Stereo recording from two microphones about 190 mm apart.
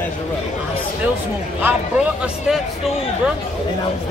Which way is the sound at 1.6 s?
5° right (ahead or behind).